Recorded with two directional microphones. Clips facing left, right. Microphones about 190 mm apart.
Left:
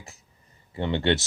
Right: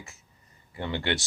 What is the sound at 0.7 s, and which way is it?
Speech, 25° left (ahead or behind).